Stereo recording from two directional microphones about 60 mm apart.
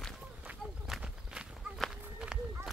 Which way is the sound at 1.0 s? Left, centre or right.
Centre.